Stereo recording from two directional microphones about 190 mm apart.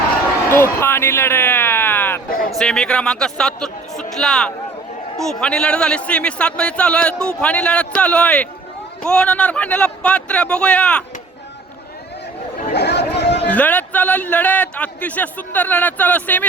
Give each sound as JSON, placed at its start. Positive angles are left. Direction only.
{"t": 0.4, "sound": "a sound", "side_deg": 10}
{"t": 2.5, "sound": "a man's voice", "side_deg": 0}
{"t": 12.7, "sound": "chatter", "side_deg": 60}
{"t": 13.5, "sound": "a man's voice", "side_deg": 10}